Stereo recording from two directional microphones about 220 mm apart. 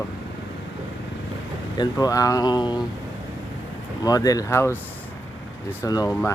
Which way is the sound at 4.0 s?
15° left (ahead or behind).